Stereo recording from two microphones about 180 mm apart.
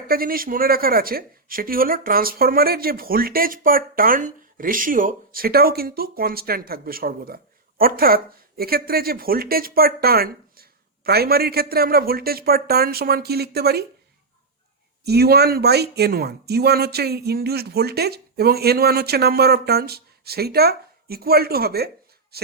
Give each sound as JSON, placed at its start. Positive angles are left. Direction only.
{"t": 0.1, "sound": "speech", "side_deg": -55}
{"t": 15.0, "sound": "speech", "side_deg": -65}